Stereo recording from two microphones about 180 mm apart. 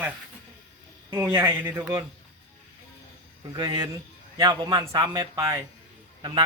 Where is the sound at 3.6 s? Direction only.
25° right (ahead or behind).